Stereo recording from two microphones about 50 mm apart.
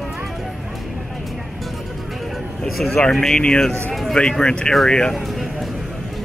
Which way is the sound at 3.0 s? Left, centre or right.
Centre.